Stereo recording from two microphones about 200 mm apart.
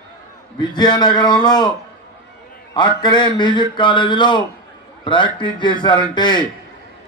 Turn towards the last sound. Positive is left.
turn(degrees=20)  # may be behind; listen again after turning